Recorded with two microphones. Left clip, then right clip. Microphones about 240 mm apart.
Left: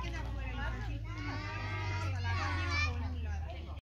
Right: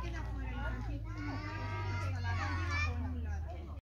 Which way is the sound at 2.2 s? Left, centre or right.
Right.